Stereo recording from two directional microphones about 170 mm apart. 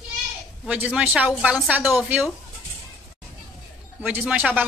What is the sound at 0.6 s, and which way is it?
A woman's voice, 5° right (ahead or behind).